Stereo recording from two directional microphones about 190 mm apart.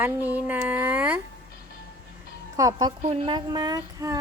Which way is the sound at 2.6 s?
20° right (ahead or behind).